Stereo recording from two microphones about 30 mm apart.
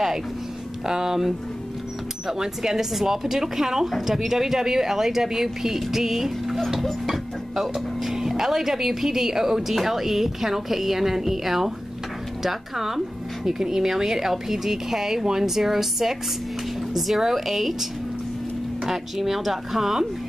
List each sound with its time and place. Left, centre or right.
0.8 s speech: centre
7.6 s speech: centre
18.9 s speech: centre